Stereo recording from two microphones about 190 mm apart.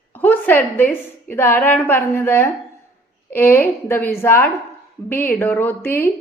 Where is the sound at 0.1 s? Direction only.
10° left (ahead or behind).